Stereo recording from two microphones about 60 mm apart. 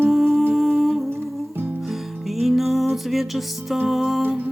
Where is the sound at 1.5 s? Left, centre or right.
Right.